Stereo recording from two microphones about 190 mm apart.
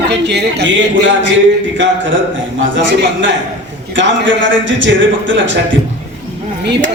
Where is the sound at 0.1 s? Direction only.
65° right (ahead or behind).